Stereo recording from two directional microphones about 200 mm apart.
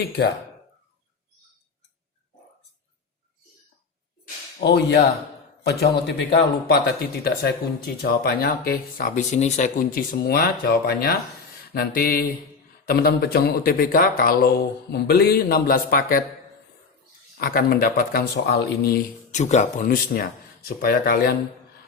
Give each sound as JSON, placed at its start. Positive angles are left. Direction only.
{"t": 4.6, "sound": "a man's voice", "side_deg": 55}
{"t": 17.3, "sound": "a man's voice", "side_deg": 45}
{"t": 19.3, "sound": "a man's voice", "side_deg": 35}